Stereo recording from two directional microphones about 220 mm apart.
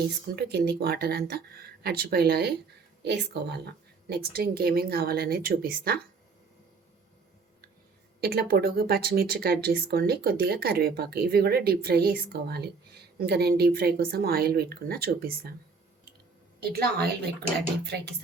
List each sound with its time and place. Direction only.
0.3 s speech: 50° right (ahead or behind)
8.2 s speech: 45° right (ahead or behind)
16.6 s speech: 45° right (ahead or behind)